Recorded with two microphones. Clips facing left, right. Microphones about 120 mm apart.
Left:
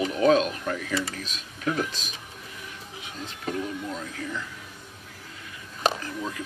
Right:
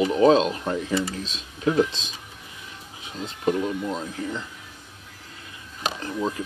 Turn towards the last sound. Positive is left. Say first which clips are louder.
# right 6 dB
turn(degrees=-30)  # may be behind; listen again after turning